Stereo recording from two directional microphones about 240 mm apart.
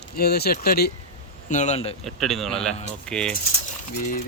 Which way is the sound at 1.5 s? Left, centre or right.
Left.